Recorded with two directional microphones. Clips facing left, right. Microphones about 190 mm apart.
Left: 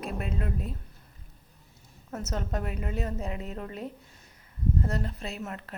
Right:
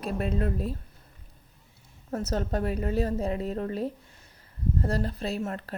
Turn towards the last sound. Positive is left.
turn(degrees=-35)  # may be behind; listen again after turning